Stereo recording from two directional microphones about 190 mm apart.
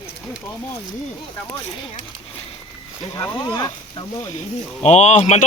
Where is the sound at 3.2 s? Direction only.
20° left (ahead or behind).